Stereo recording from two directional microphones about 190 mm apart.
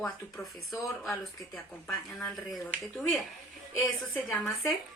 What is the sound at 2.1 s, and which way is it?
A woman's voice, centre (ahead or behind).